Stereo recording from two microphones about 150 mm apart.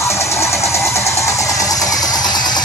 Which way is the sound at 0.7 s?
20° left (ahead or behind).